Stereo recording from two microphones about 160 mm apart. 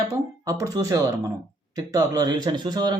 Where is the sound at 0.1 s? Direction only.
20° right (ahead or behind).